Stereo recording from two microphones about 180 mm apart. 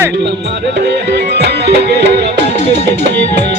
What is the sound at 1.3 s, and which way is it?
Music, 65° right (ahead or behind).